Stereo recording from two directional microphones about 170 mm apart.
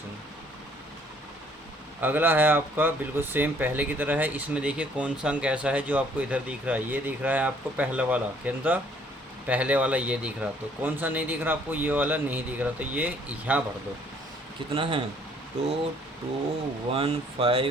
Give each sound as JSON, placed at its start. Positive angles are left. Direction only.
{"t": 2.0, "sound": "speech", "side_deg": -10}
{"t": 14.7, "sound": "speech", "side_deg": -30}
{"t": 16.9, "sound": "speech", "side_deg": -35}